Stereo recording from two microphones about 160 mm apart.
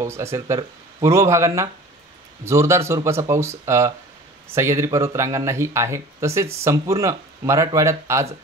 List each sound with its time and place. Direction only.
0.0 s speech: 15° right (ahead or behind)